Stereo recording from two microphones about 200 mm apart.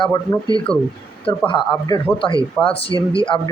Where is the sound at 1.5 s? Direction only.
20° left (ahead or behind).